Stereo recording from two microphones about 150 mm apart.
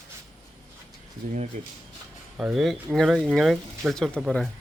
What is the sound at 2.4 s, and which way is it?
Speech, 5° right (ahead or behind).